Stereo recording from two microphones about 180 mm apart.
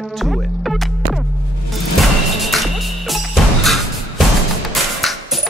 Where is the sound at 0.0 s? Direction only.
Centre (ahead or behind).